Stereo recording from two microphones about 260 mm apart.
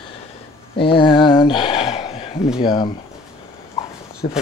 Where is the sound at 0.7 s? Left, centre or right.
Centre.